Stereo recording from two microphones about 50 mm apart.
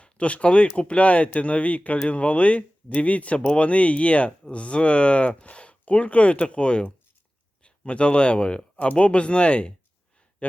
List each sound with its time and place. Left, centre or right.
0.0 s speech: left